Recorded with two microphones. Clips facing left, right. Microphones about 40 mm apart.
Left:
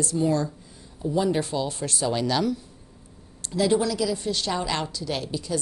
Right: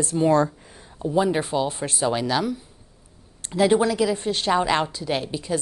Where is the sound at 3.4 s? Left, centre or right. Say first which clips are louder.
Right 4 dB; right.